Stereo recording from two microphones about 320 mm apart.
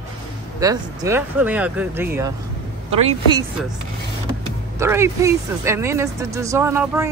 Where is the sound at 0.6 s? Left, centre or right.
Centre.